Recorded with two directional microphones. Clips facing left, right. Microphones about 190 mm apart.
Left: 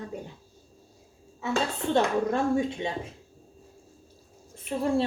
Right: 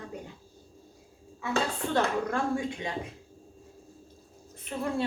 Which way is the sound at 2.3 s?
25° left (ahead or behind).